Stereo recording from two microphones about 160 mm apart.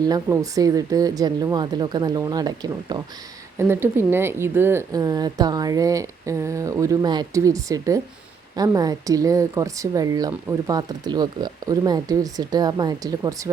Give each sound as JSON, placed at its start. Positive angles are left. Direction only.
{"t": 0.0, "sound": "speech", "side_deg": -20}
{"t": 3.6, "sound": "speech", "side_deg": -15}